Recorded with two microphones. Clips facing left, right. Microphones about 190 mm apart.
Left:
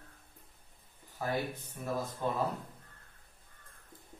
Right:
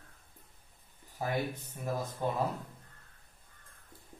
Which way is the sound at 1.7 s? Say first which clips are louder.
Even; 20° right (ahead or behind).